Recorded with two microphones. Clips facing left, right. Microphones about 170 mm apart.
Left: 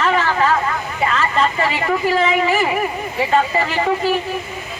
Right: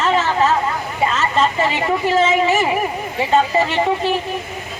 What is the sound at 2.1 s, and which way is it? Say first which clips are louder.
Speech: right 2 dB; 20° right (ahead or behind).